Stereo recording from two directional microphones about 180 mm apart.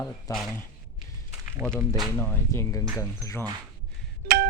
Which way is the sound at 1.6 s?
10° left (ahead or behind).